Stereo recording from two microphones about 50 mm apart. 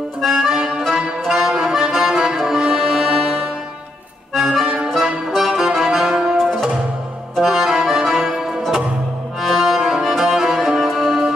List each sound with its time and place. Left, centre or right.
0.2 s accordion: centre
1.2 s music: centre
4.8 s music: centre
7.3 s music: centre